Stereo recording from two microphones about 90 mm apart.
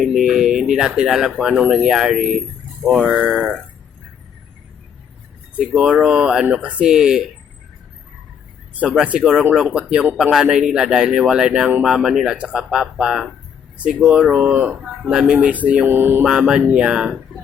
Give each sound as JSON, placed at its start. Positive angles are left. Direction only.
{"t": 0.0, "sound": "speech", "side_deg": -5}
{"t": 2.9, "sound": "speech", "side_deg": -20}
{"t": 5.5, "sound": "speech", "side_deg": -5}
{"t": 8.8, "sound": "speech", "side_deg": -15}
{"t": 16.2, "sound": "speech", "side_deg": -10}